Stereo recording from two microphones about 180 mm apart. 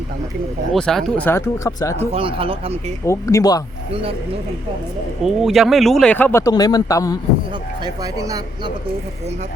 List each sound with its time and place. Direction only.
0.7 s speech: centre (ahead or behind)
2.1 s speech: 30° right (ahead or behind)
3.1 s speech: 15° left (ahead or behind)
5.2 s speech: centre (ahead or behind); by 7.2 s 20° left (ahead or behind)
7.9 s speech: 20° right (ahead or behind)